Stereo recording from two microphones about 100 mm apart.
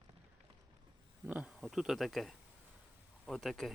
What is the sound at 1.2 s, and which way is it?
Speech, 15° right (ahead or behind).